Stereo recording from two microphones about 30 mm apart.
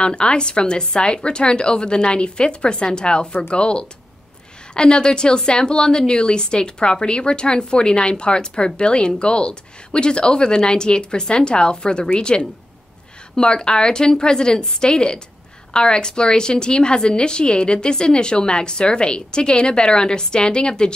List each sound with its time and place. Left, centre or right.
0.0 s a woman's voice: left